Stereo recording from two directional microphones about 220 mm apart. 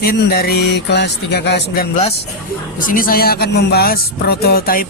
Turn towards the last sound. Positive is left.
turn(degrees=40)  # may be behind; listen again after turning